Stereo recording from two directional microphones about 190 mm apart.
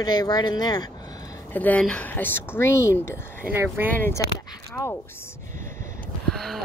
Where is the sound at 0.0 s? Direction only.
20° left (ahead or behind).